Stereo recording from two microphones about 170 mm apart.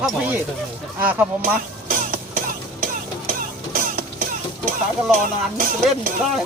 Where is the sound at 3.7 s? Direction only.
50° right (ahead or behind).